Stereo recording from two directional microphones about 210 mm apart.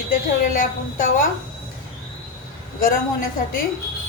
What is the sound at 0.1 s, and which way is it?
A woman's voice, 40° left (ahead or behind).